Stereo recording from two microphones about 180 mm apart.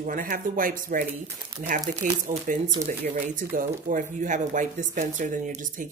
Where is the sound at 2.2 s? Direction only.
45° right (ahead or behind).